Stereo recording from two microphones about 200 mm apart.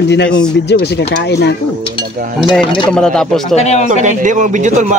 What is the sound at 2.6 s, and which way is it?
Speech, 25° left (ahead or behind).